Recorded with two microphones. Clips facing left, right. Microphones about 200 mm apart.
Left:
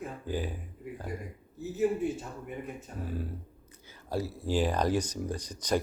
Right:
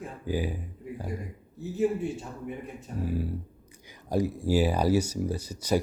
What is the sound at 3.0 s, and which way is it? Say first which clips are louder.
Speech: right 7 dB; 10° right (ahead or behind).